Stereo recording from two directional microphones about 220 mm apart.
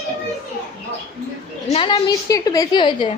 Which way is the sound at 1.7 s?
20° left (ahead or behind).